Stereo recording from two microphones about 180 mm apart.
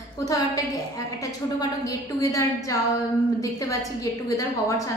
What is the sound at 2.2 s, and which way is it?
Speech, 15° left (ahead or behind).